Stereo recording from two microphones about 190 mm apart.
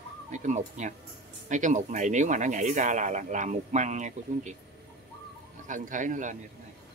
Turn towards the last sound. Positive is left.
turn(degrees=-40)  # may be behind; listen again after turning